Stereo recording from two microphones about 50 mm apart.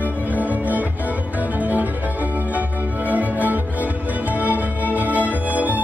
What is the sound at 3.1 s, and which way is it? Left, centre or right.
Music, right.